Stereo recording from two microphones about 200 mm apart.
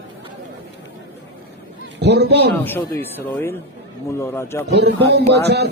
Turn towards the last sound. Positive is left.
turn(degrees=-55)  # may be behind; listen again after turning